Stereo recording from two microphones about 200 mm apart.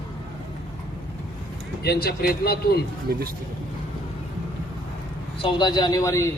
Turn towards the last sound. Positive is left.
turn(degrees=15)  # may be behind; listen again after turning